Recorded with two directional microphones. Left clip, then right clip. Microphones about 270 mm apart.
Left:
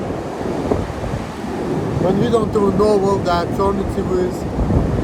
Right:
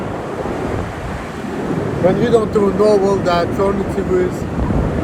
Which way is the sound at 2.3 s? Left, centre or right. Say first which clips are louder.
Right 2 dB; centre.